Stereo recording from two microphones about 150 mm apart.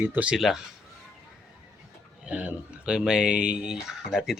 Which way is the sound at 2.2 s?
10° right (ahead or behind).